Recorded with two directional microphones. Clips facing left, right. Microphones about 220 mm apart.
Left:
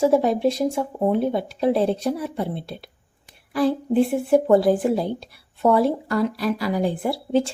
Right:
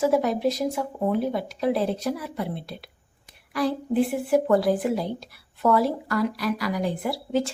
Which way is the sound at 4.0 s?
25° left (ahead or behind).